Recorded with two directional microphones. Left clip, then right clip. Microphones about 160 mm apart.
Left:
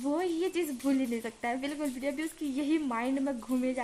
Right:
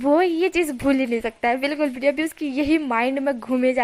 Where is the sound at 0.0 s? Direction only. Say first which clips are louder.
Right 13 dB; 25° right (ahead or behind).